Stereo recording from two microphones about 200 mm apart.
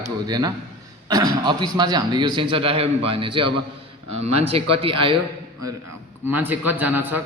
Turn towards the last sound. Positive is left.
turn(degrees=-10)  # may be behind; listen again after turning